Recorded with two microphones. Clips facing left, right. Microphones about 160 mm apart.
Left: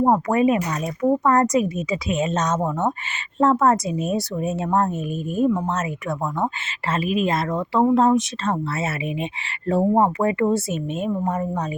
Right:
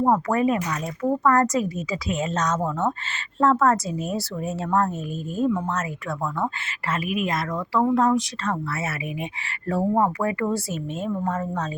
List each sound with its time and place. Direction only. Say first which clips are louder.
0.0 s a woman's voice: left 3 dB; 20° left (ahead or behind)